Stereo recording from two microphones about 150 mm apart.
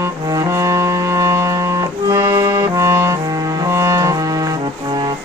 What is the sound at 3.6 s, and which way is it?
Music, 20° right (ahead or behind).